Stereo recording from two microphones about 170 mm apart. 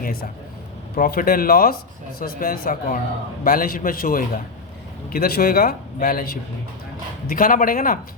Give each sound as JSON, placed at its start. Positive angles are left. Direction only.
{"t": 0.9, "sound": "a man's voice", "side_deg": 60}